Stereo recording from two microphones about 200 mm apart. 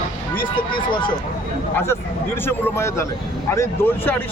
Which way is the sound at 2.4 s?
10° left (ahead or behind).